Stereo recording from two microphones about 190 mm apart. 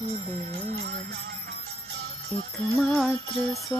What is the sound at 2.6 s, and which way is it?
Music, 5° left (ahead or behind).